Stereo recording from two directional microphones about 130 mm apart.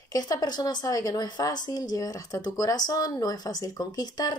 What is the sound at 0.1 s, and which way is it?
A woman's voice, 30° left (ahead or behind).